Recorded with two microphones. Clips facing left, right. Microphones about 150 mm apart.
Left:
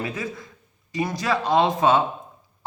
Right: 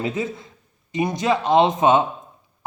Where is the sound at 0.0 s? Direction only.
25° right (ahead or behind).